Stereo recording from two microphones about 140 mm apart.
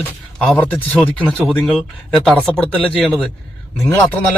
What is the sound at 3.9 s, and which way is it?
Speech, 15° left (ahead or behind).